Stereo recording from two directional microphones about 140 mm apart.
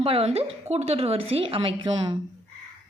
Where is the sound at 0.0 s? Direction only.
45° right (ahead or behind).